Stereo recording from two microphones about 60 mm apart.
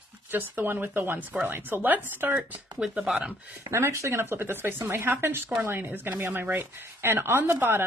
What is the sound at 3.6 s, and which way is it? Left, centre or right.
Speech, right.